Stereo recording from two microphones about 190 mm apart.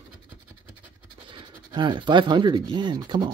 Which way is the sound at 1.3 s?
25° right (ahead or behind).